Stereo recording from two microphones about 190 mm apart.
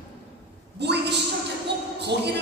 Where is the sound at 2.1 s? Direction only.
65° right (ahead or behind).